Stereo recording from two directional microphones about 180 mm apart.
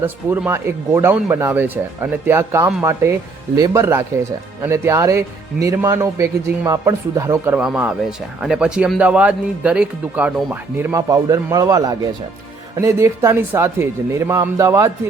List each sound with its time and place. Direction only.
0.0 s speech: 10° right (ahead or behind)